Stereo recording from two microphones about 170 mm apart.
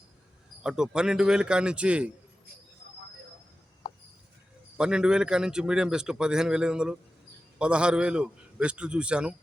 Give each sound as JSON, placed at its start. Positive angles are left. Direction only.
{"t": 0.6, "sound": "a man's voice", "side_deg": -5}
{"t": 4.8, "sound": "a man's voice", "side_deg": -5}